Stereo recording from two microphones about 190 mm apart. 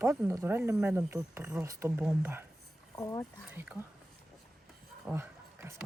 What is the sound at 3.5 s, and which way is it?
Speech, 10° right (ahead or behind).